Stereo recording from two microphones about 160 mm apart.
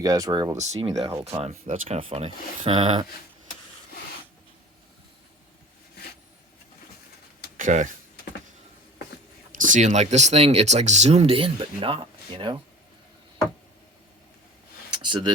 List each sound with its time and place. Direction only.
0.0 s speech: 20° right (ahead or behind)
0.5 s speech: 45° right (ahead or behind)
2.0 s speech: 35° right (ahead or behind)
7.5 s speech: 55° right (ahead or behind)
9.5 s speech: 55° right (ahead or behind); by 12.5 s 30° right (ahead or behind)
15.0 s speech: 30° right (ahead or behind)